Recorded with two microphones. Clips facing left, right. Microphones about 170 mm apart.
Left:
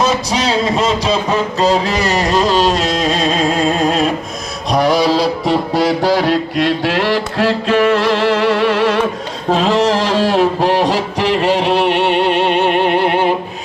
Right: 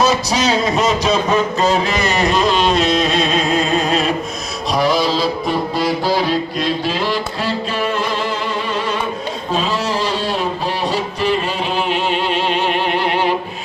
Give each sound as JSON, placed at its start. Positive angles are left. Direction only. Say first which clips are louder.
{"t": 0.3, "sound": "speech", "louder": "left 1 dB", "side_deg": 25}
{"t": 4.7, "sound": "music", "louder": "left 4 dB", "side_deg": 60}
{"t": 9.6, "sound": "a sound", "louder": "left 7 dB", "side_deg": 90}